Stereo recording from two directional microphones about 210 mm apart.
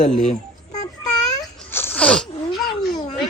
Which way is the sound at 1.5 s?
10° left (ahead or behind).